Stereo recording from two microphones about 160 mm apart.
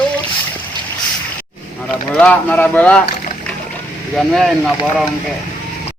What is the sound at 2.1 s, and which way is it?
Speech, 10° left (ahead or behind).